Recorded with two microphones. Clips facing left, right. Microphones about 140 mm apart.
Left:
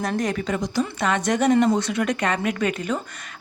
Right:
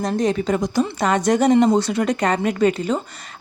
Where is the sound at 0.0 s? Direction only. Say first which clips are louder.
Right 4 dB; 20° right (ahead or behind).